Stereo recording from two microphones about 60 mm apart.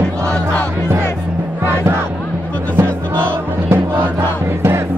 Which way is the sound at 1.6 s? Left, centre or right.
Right.